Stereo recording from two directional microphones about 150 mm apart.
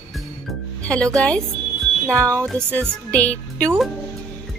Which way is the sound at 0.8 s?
5° left (ahead or behind).